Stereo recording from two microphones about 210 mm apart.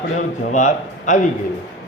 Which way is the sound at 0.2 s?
35° left (ahead or behind).